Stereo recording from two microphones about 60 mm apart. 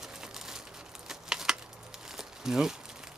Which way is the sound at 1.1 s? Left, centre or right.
Centre.